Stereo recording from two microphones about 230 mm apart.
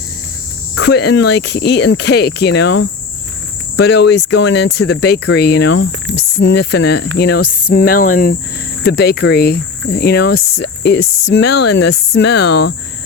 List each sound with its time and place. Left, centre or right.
0.8 s speech: left